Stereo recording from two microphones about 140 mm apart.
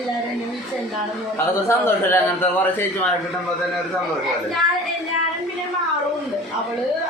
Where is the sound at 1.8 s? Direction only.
15° left (ahead or behind).